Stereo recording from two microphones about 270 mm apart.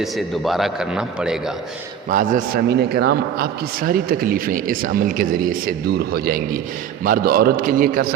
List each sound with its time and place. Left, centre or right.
0.0 s a man's voice: centre
2.0 s a man's voice: right